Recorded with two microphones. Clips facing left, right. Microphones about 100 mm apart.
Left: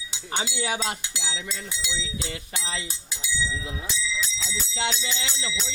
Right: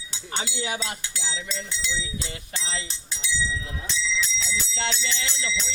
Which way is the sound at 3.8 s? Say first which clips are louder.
Right 4 dB; 5° left (ahead or behind).